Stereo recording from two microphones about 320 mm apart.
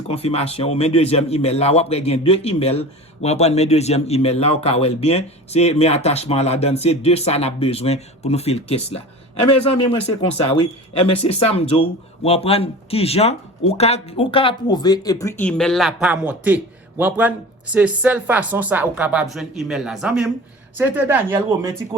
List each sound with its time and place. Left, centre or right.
0.1 s a man's voice: centre